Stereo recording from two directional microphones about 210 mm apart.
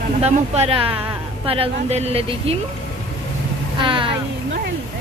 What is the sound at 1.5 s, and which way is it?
Speech, 30° right (ahead or behind).